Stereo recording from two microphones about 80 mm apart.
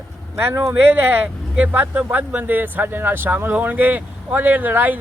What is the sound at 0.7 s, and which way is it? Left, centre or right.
Speech, right.